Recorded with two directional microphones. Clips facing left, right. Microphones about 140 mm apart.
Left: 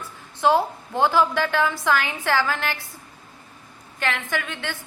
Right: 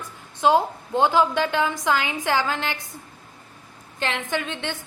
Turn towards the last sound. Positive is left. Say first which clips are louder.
# right 2 dB
turn(degrees=-20)  # may be behind; listen again after turning